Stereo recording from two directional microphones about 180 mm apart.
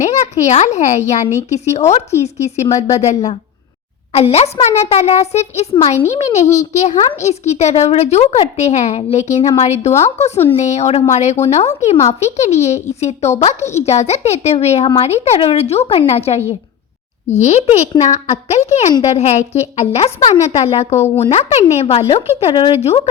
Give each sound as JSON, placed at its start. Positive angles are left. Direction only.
{"t": 0.0, "sound": "a woman's voice", "side_deg": 40}